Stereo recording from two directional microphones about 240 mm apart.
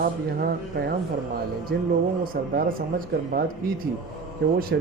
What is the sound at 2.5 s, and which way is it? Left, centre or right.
Speech, right.